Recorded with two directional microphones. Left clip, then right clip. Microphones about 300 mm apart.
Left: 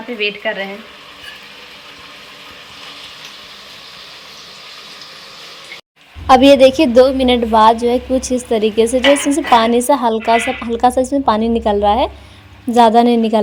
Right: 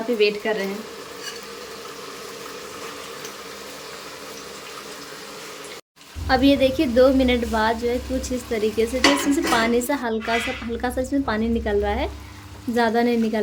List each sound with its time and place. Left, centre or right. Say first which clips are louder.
0.2 s speech: left 4 dB; centre
6.2 s a woman's voice: left 11 dB; left